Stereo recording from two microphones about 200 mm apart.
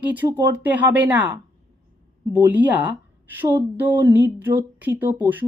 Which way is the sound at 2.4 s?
10° right (ahead or behind).